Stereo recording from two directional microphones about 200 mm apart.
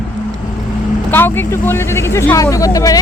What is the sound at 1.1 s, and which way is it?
Speech, 10° left (ahead or behind).